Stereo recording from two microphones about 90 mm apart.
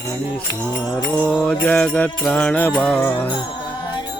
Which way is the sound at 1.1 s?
15° left (ahead or behind).